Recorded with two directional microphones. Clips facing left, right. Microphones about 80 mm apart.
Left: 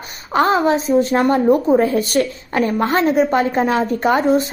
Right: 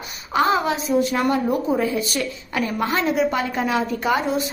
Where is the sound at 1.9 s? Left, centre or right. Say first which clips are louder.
Left 7 dB; left.